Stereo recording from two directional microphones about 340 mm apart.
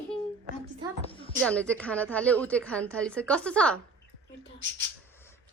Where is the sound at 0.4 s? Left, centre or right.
Centre.